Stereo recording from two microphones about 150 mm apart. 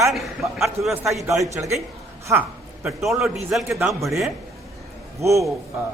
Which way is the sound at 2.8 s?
Centre (ahead or behind).